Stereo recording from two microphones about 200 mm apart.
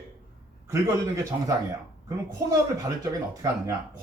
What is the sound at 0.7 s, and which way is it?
Speech, 15° right (ahead or behind).